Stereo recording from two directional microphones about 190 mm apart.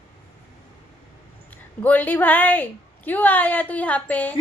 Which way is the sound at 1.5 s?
10° left (ahead or behind).